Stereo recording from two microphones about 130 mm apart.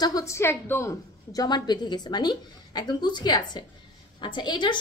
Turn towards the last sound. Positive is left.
turn(degrees=35)  # may be behind; listen again after turning